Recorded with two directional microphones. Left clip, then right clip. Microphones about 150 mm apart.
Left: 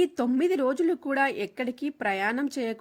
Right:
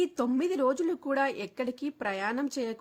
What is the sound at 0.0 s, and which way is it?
Speech, 20° left (ahead or behind).